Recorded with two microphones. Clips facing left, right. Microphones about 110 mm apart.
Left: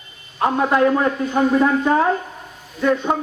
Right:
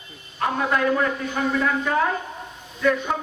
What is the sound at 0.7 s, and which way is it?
A man's voice, 30° left (ahead or behind).